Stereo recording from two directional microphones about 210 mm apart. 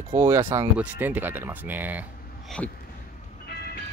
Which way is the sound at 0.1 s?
10° right (ahead or behind).